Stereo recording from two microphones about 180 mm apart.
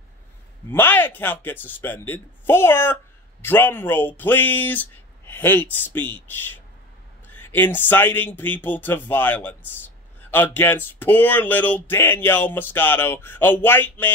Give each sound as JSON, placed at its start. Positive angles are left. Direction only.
{"t": 0.7, "sound": "speech", "side_deg": 10}